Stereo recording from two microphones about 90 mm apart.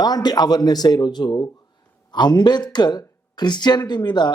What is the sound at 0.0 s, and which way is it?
Speech, 45° left (ahead or behind).